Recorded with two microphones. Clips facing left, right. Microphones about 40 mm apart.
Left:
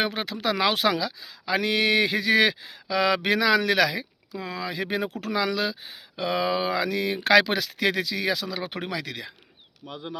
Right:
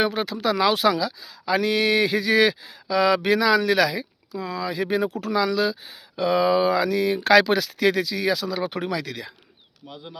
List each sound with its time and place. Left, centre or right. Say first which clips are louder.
0.1 s speech: right 3 dB; left
9.8 s speech: left 2 dB; left